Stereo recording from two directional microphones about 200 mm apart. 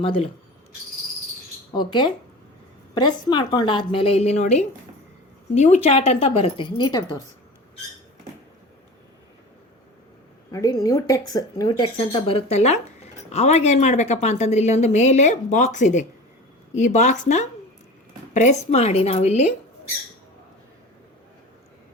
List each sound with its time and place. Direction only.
0.0 s a woman's voice: 25° left (ahead or behind)
1.7 s a woman's voice: 20° left (ahead or behind)
10.5 s speech: 15° left (ahead or behind); by 19.5 s 35° left (ahead or behind)